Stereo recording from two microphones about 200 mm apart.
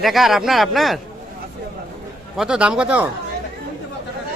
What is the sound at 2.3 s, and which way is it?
Speech, 5° right (ahead or behind).